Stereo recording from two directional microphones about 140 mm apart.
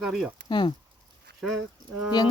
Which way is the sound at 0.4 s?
35° left (ahead or behind).